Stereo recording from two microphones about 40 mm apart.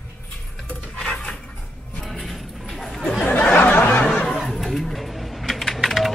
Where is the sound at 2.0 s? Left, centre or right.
Centre.